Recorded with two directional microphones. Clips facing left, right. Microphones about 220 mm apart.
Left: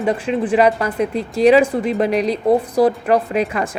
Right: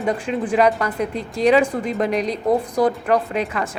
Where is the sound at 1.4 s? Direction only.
5° left (ahead or behind).